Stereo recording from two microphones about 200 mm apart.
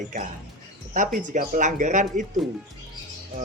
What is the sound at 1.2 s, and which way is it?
Speech, 40° right (ahead or behind).